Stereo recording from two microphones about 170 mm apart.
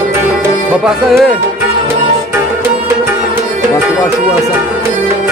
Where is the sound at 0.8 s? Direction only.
Centre (ahead or behind).